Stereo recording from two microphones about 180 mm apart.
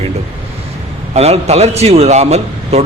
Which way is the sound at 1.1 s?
35° right (ahead or behind).